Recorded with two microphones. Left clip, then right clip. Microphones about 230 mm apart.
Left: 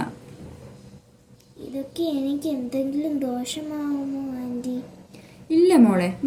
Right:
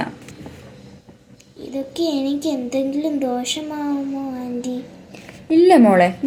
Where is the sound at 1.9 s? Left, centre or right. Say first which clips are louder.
Right 4 dB; centre.